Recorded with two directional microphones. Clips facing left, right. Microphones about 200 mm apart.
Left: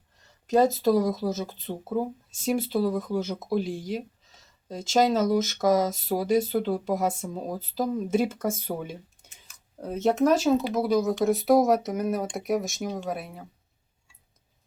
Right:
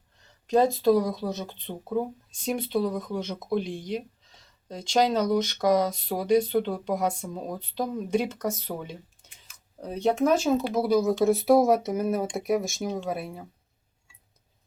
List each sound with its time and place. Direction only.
0.3 s speech: centre (ahead or behind)